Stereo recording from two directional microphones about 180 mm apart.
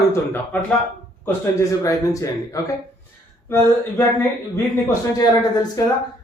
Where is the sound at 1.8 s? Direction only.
20° left (ahead or behind).